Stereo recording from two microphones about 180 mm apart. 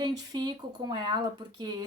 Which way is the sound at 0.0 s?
25° right (ahead or behind).